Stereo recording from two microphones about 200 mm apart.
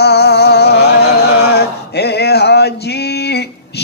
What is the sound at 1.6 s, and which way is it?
Male singing, 55° left (ahead or behind).